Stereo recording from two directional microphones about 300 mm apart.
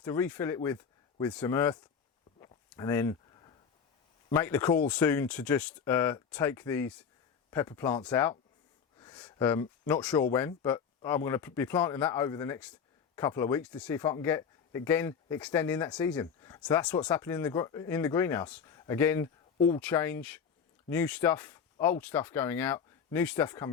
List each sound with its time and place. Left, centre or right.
0.0 s speech: centre
2.4 s a sound: centre
4.3 s speech: centre